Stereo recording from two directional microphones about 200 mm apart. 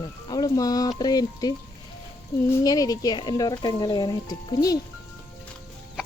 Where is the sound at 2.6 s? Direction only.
20° left (ahead or behind).